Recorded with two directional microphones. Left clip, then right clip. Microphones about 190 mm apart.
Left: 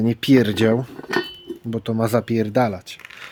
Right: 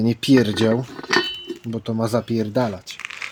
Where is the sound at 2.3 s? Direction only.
5° left (ahead or behind).